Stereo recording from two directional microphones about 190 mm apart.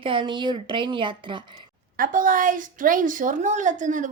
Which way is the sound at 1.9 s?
45° right (ahead or behind).